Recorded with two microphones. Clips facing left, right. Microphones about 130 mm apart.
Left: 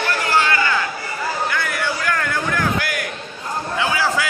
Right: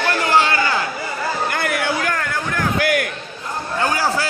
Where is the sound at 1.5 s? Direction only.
55° right (ahead or behind).